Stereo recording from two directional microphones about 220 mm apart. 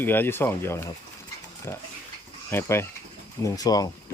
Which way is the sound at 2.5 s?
10° left (ahead or behind).